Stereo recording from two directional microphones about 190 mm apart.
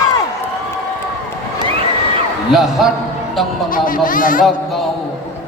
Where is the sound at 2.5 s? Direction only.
Centre (ahead or behind).